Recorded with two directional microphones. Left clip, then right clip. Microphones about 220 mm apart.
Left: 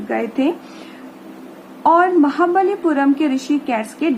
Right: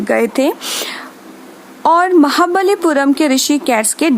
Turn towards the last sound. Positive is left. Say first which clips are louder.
# right 6 dB
turn(degrees=-50)  # may be behind; listen again after turning